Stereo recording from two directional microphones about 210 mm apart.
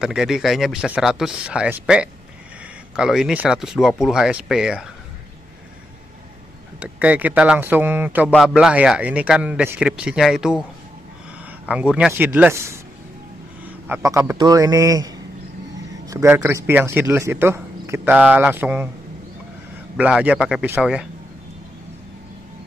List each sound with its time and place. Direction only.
0.0 s a man's voice: centre (ahead or behind)
6.8 s a man's voice: 5° right (ahead or behind)
11.6 s speech: 5° right (ahead or behind)
13.8 s speech: 10° right (ahead or behind)
20.0 s a man's voice: 5° right (ahead or behind)